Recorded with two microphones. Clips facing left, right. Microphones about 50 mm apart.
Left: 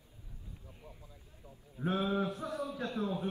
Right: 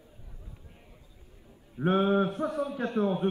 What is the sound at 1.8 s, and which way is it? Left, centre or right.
A man's voice, right.